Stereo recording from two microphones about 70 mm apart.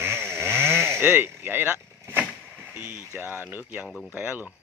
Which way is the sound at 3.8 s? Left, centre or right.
Right.